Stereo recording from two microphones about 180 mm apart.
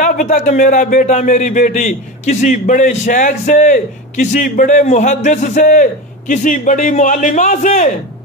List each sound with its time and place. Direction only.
0.0 s a man's voice: 45° left (ahead or behind)